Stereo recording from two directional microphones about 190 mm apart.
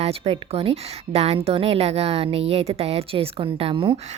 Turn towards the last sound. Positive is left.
turn(degrees=-25)  # may be behind; listen again after turning